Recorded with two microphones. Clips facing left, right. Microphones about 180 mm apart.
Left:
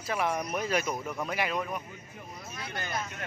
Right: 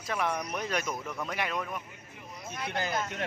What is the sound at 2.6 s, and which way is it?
Speech, 75° right (ahead or behind).